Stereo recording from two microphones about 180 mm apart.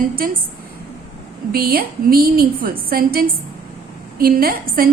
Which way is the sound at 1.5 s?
55° right (ahead or behind).